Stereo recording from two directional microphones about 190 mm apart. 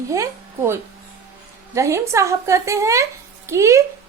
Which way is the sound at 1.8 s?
15° right (ahead or behind).